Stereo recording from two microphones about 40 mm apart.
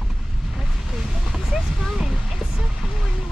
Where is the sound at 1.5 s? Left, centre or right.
Centre.